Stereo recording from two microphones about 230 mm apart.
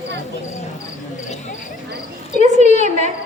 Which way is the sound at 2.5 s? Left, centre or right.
Left.